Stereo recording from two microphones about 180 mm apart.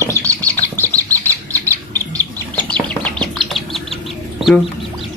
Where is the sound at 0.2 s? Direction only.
15° right (ahead or behind).